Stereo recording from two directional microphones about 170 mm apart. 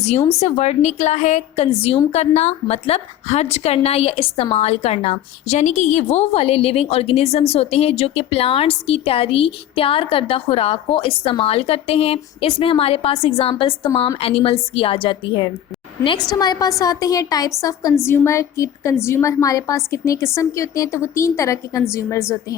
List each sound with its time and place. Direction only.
0.3 s a woman's voice: 40° left (ahead or behind); by 22.5 s 15° left (ahead or behind)